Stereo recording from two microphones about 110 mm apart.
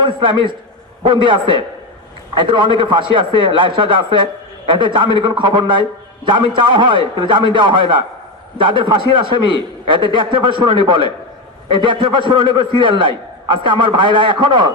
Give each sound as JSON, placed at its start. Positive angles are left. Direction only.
{"t": 0.0, "sound": "a man's voice", "side_deg": -45}